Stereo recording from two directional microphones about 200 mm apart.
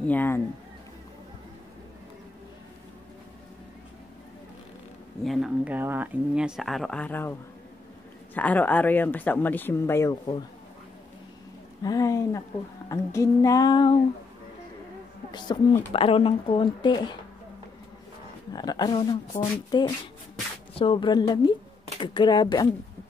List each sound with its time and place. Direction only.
0.0 s speech: 10° left (ahead or behind)
5.2 s speech: centre (ahead or behind)
8.4 s speech: 10° left (ahead or behind)
11.8 s speech: 15° left (ahead or behind)
15.3 s speech: 20° left (ahead or behind)
18.5 s speech: 20° left (ahead or behind)